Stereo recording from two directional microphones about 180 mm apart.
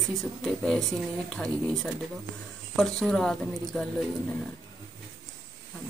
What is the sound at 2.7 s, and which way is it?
Speech, centre (ahead or behind).